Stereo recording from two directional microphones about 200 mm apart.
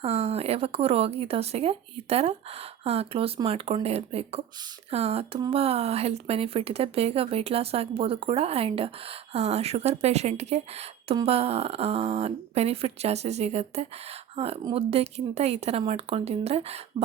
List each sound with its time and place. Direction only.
0.0 s speech: 30° right (ahead or behind)